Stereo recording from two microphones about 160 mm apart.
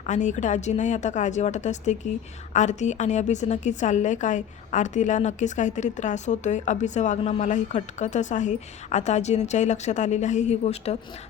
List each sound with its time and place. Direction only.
0.0 s a woman's voice: 50° left (ahead or behind)